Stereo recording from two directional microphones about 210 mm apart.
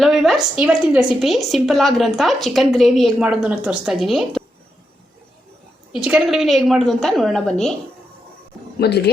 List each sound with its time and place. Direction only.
0.0 s a woman's voice: centre (ahead or behind)
5.9 s a woman's voice: 5° right (ahead or behind)
8.8 s speech: 50° left (ahead or behind)